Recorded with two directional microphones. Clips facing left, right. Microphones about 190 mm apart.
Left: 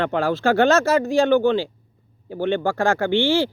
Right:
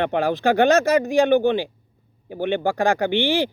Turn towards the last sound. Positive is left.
turn(degrees=-15)  # may be behind; listen again after turning